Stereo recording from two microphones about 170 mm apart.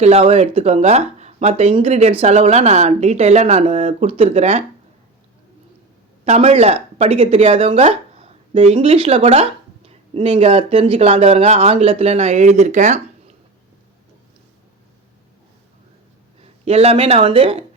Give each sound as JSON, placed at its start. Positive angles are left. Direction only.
{"t": 0.0, "sound": "speech", "side_deg": -40}
{"t": 6.2, "sound": "speech", "side_deg": -35}
{"t": 16.4, "sound": "speech", "side_deg": -35}